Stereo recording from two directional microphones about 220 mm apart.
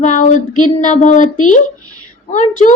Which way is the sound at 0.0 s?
35° left (ahead or behind).